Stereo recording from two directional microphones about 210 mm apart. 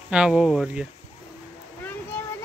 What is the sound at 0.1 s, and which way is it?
Speech, 5° right (ahead or behind).